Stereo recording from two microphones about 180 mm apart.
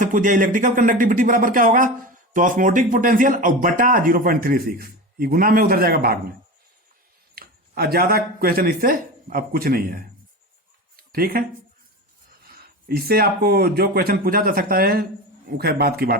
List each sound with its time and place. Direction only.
0.0 s speech: 45° right (ahead or behind)
7.3 s speech: 55° right (ahead or behind)
10.9 s a sound: 55° right (ahead or behind)
12.6 s speech: 60° right (ahead or behind)